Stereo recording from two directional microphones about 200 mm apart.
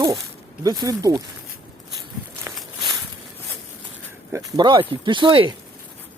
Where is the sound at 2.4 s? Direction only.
20° right (ahead or behind).